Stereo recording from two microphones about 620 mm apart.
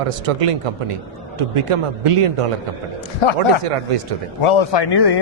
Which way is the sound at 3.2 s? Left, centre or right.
Left.